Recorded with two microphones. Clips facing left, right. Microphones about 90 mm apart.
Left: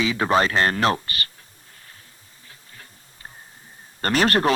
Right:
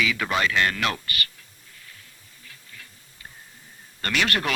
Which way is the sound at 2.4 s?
35° left (ahead or behind).